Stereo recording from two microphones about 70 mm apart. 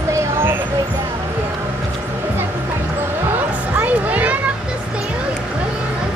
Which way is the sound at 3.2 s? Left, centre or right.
Right.